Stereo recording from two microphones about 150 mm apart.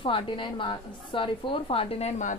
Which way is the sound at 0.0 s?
35° left (ahead or behind).